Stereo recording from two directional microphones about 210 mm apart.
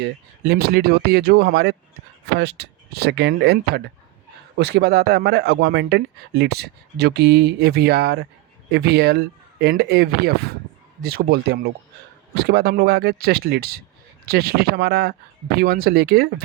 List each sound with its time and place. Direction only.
0.0 s speech: 50° right (ahead or behind)